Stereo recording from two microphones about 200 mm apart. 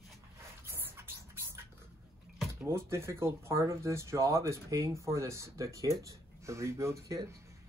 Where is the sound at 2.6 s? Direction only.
15° right (ahead or behind).